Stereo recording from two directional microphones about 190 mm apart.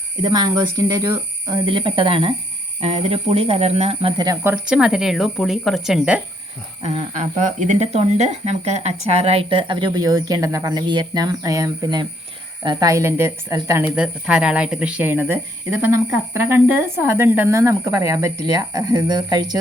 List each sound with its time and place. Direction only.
0.2 s speech: 20° right (ahead or behind)
4.2 s speech: 20° right (ahead or behind)
4.5 s speech: 5° right (ahead or behind)
6.8 s a woman's voice: 40° right (ahead or behind); by 19.5 s 20° right (ahead or behind)